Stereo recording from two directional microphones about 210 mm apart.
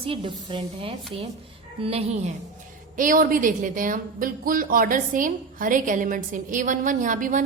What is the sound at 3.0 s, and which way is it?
A woman's voice, 40° right (ahead or behind).